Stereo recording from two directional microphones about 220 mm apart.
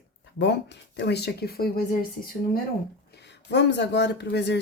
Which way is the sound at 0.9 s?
50° left (ahead or behind).